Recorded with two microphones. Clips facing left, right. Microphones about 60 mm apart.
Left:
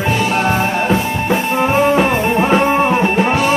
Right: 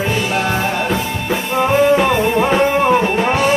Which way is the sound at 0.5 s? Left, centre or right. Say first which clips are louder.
Left 3 dB; left.